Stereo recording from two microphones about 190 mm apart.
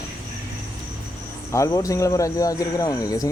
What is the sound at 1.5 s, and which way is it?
Speech, 15° left (ahead or behind).